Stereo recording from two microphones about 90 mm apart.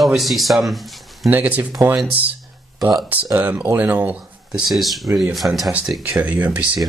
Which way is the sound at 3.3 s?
20° right (ahead or behind).